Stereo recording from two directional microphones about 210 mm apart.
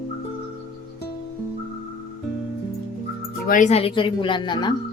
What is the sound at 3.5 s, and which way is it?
Speech, 35° left (ahead or behind).